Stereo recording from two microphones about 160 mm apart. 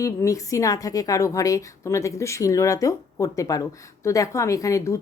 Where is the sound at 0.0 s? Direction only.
20° left (ahead or behind).